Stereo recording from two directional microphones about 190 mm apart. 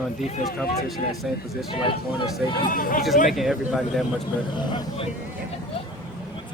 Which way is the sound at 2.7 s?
45° left (ahead or behind).